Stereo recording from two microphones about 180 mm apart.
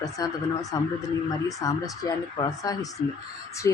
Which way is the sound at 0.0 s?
20° left (ahead or behind).